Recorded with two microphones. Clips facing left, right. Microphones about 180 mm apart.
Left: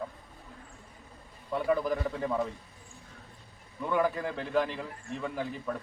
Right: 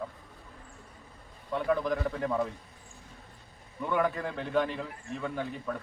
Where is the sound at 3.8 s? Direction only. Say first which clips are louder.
Even; centre (ahead or behind).